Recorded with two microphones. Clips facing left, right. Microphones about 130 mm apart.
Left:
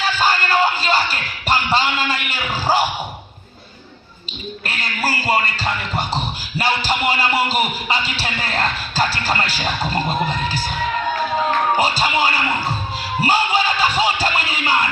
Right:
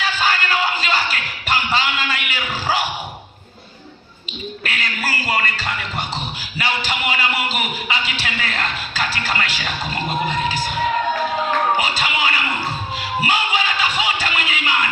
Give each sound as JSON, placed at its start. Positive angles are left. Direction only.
{"t": 0.0, "sound": "music", "side_deg": 35}
{"t": 2.5, "sound": "a sound", "side_deg": 30}
{"t": 4.6, "sound": "a sound", "side_deg": 35}
{"t": 6.6, "sound": "speech", "side_deg": 35}
{"t": 11.8, "sound": "speech", "side_deg": 35}
{"t": 13.0, "sound": "music", "side_deg": 35}